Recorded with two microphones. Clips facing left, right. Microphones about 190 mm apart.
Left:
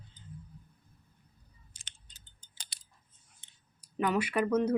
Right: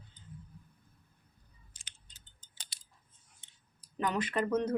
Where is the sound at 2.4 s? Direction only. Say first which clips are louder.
Left 1 dB; 60° left (ahead or behind).